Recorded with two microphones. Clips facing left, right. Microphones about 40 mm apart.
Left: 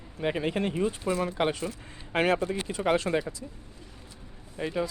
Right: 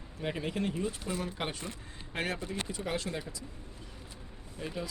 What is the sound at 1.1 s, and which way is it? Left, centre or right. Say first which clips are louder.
Speech: left 9 dB; left.